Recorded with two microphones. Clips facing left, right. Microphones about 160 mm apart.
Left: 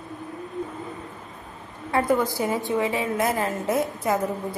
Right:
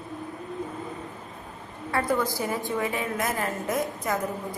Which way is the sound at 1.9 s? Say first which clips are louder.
Left 4 dB; 20° left (ahead or behind).